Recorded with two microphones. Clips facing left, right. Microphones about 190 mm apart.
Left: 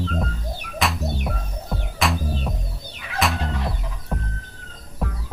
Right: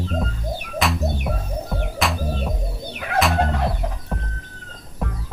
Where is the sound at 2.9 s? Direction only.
60° right (ahead or behind).